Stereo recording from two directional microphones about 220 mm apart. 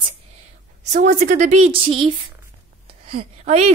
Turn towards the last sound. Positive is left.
turn(degrees=-30)  # may be behind; listen again after turning